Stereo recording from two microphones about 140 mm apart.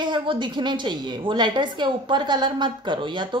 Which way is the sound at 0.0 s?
35° right (ahead or behind).